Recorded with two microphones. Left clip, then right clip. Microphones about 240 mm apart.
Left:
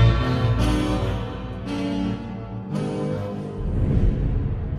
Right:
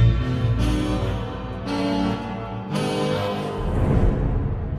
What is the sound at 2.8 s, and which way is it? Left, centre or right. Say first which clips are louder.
Music: right 4 dB; right.